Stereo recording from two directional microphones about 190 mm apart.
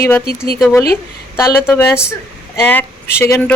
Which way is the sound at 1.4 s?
10° left (ahead or behind).